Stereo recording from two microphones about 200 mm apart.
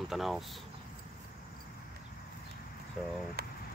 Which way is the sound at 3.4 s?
50° right (ahead or behind).